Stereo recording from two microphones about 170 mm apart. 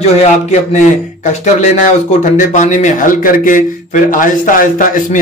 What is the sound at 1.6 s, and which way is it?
Speech, 45° left (ahead or behind).